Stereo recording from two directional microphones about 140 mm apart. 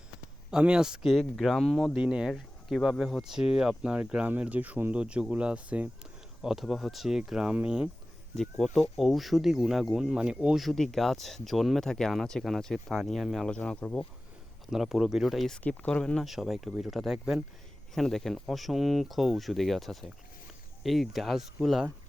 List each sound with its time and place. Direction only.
0.5 s speech: 5° right (ahead or behind)
14.7 s speech: 5° right (ahead or behind)